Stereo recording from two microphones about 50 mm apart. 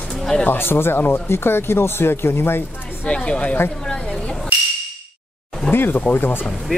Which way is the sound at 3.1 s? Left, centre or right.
Left.